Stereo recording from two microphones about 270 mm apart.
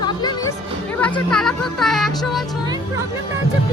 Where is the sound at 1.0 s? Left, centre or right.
Centre.